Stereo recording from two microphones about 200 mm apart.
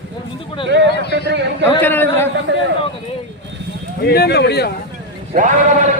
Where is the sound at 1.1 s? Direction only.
55° right (ahead or behind).